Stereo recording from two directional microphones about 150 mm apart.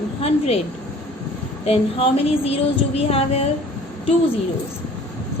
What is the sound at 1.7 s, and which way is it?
A woman's voice, 40° left (ahead or behind).